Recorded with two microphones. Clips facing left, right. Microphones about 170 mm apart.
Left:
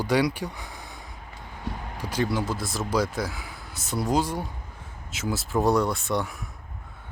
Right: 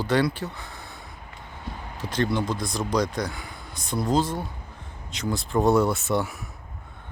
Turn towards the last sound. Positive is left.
turn(degrees=0)  # may be behind; listen again after turning